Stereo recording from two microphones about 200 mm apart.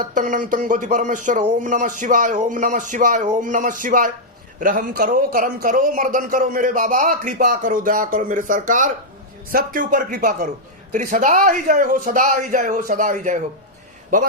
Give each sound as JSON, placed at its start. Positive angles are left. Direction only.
{"t": 0.1, "sound": "a man's voice", "side_deg": -40}